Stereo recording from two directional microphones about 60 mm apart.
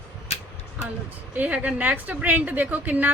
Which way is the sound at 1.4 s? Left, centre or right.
Right.